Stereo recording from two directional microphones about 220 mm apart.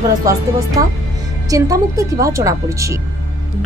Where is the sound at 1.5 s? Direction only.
15° right (ahead or behind).